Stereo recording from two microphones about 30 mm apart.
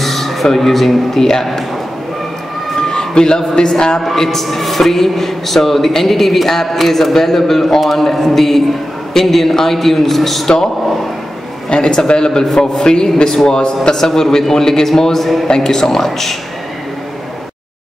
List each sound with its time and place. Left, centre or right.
0.0 s speech: centre
2.9 s a sound: left
3.5 s a man's voice: left
4.0 s a man's voice: centre
11.7 s a man's voice: left
13.9 s a man's voice: centre